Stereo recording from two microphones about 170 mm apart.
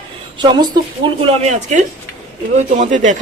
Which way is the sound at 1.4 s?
45° right (ahead or behind).